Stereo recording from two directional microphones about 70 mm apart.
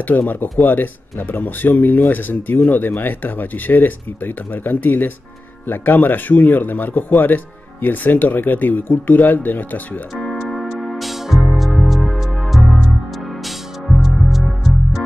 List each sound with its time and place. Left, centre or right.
0.0 s speech: left
10.2 s music: centre